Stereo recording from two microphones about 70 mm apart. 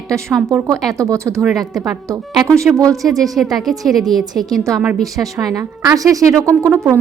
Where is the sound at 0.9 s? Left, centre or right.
Right.